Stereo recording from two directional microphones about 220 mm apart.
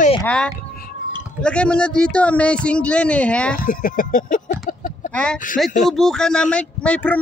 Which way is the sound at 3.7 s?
40° left (ahead or behind).